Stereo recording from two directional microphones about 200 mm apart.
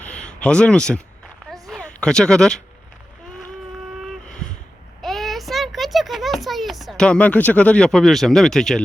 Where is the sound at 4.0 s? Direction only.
5° left (ahead or behind).